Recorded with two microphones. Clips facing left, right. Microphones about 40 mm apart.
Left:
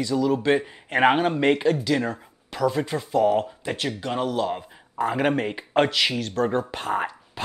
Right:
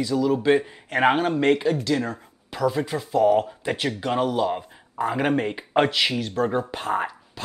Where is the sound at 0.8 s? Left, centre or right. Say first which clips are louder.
Left 1 dB; centre.